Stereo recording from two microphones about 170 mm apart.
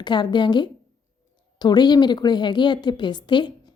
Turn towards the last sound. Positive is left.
turn(degrees=25)  # may be behind; listen again after turning